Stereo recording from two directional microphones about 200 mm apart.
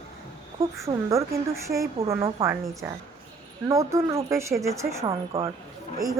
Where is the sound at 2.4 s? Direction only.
15° right (ahead or behind).